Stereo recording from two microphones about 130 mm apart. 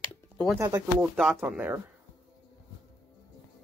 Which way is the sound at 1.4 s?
15° right (ahead or behind).